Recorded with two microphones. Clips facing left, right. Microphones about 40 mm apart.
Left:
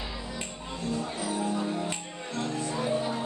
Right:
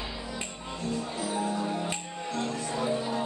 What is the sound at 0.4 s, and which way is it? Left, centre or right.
Music, centre.